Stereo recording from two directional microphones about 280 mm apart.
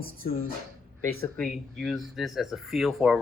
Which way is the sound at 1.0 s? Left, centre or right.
Centre.